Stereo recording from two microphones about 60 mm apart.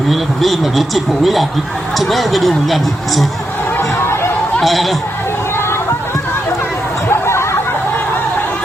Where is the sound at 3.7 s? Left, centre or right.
Left.